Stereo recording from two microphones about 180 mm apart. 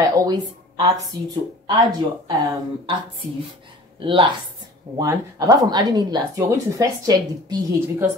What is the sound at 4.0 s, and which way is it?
A woman's voice, 25° right (ahead or behind).